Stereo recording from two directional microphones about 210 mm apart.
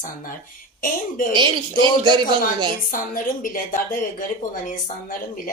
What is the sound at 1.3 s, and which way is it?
Speech, 20° right (ahead or behind).